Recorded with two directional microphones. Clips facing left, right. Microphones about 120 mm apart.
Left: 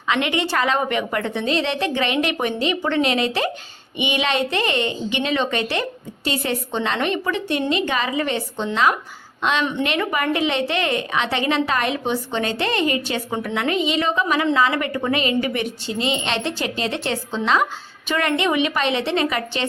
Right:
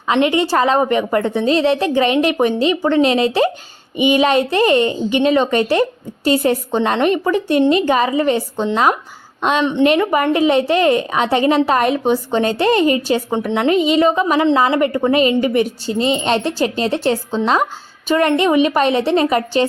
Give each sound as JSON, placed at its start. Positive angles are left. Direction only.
{"t": 0.1, "sound": "a woman's voice", "side_deg": -35}